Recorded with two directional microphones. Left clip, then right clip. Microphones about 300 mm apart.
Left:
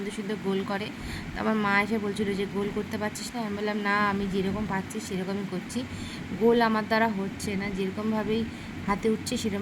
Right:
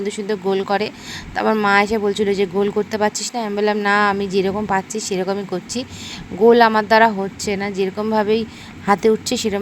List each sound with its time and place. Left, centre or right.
0.3 s speech: right